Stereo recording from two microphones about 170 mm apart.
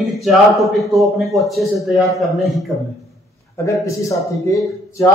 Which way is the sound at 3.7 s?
20° left (ahead or behind).